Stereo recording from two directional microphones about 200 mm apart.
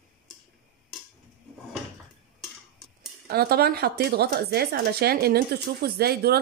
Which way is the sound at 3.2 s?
50° right (ahead or behind).